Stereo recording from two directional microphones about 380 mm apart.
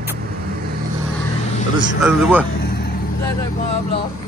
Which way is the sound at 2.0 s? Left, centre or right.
Centre.